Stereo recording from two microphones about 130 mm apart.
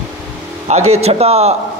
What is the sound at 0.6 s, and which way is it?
Speech, 55° right (ahead or behind).